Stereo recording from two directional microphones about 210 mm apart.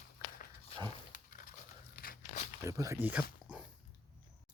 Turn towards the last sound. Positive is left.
turn(degrees=-5)  # may be behind; listen again after turning